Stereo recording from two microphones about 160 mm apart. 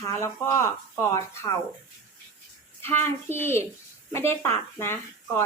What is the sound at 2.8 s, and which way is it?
Speech, 15° left (ahead or behind).